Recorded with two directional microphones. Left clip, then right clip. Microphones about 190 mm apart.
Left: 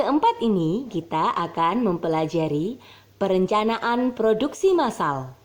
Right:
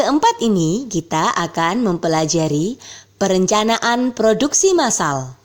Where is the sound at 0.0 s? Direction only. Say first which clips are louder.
Right 5 dB; 35° right (ahead or behind).